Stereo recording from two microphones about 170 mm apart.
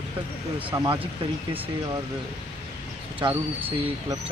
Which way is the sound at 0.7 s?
25° right (ahead or behind).